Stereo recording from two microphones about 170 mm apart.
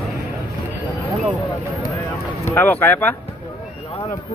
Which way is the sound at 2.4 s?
15° left (ahead or behind).